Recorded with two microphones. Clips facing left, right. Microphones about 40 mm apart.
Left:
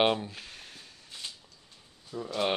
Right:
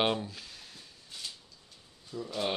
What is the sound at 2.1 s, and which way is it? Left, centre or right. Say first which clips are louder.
Speech: left 2 dB; left.